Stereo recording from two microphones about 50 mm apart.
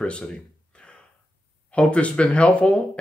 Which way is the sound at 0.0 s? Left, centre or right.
Left.